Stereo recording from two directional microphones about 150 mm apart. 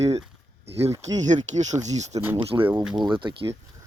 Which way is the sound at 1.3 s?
50° right (ahead or behind).